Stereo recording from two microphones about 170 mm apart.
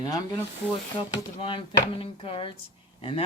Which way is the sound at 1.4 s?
30° left (ahead or behind).